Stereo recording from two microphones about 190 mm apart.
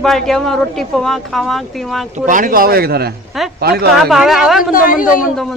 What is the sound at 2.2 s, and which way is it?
A woman's voice, 45° right (ahead or behind).